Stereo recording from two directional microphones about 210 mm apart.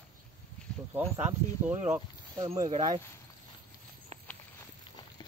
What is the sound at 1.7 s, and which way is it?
Speech, 10° right (ahead or behind).